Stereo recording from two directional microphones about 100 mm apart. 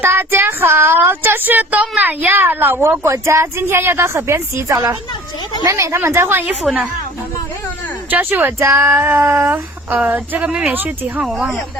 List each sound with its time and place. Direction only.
0.0 s a woman's voice: 20° right (ahead or behind)
6.6 s speech: centre (ahead or behind)
8.1 s a woman's voice: 20° right (ahead or behind)
11.3 s speech: centre (ahead or behind)